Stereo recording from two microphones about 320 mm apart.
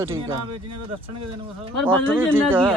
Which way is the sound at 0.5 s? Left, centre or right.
Right.